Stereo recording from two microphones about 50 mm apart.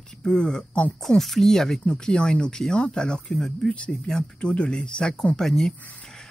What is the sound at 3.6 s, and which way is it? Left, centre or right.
Speech, left.